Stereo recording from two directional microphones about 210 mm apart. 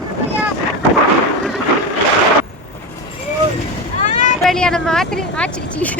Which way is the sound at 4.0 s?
35° left (ahead or behind).